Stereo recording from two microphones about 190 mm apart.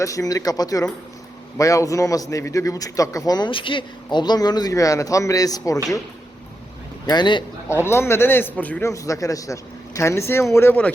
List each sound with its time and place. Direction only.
0.0 s a man's voice: 15° left (ahead or behind)
7.1 s speech: 25° left (ahead or behind)
7.8 s a man's voice: 15° left (ahead or behind)